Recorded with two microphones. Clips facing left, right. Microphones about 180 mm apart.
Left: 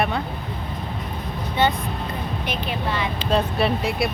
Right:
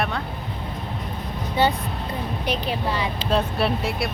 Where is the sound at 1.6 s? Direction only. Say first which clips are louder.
Even; 35° right (ahead or behind).